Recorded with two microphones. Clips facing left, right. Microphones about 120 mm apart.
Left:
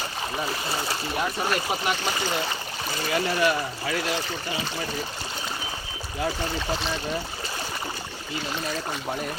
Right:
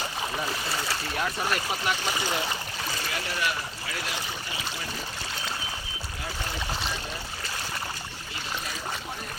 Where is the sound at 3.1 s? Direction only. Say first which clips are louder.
Left 10 dB; 30° left (ahead or behind).